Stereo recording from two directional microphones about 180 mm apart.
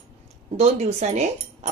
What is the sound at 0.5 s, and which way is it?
Speech, 40° right (ahead or behind).